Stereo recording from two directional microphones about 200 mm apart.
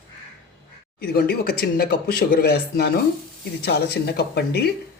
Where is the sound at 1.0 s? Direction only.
50° left (ahead or behind).